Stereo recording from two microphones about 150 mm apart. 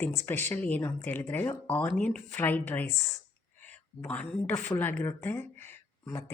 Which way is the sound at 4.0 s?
15° left (ahead or behind).